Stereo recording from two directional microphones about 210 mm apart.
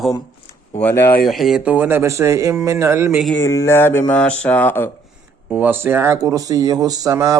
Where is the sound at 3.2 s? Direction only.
5° left (ahead or behind).